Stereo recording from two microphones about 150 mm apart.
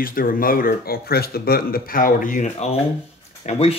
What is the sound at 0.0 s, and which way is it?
Speech, 75° left (ahead or behind).